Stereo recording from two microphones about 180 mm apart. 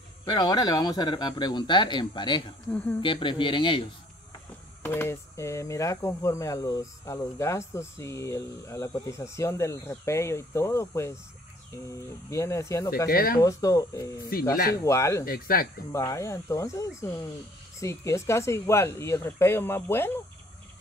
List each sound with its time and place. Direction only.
0.2 s speech: 25° left (ahead or behind)
2.7 s speech: 10° left (ahead or behind)
3.0 s speech: 25° left (ahead or behind)
4.8 s speech: 15° left (ahead or behind)
13.1 s speech: 55° left (ahead or behind)
13.4 s speech: 20° left (ahead or behind)
15.2 s speech: 55° left (ahead or behind)
15.9 s speech: 15° left (ahead or behind)